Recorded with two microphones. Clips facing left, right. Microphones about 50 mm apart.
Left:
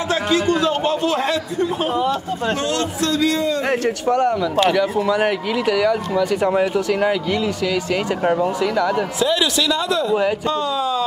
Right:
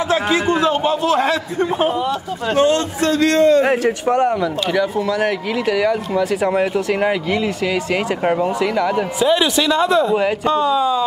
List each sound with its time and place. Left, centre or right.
0.1 s a sound: right
0.8 s a man's voice: centre
2.5 s a man's voice: right
3.1 s a man's voice: right
4.1 s a man's voice: centre
4.6 s speech: centre
5.7 s speech: centre
6.9 s a man's voice: centre
10.1 s speech: centre